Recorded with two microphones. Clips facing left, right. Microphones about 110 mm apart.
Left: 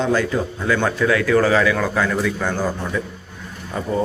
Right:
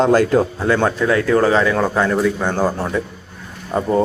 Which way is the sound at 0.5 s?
30° right (ahead or behind).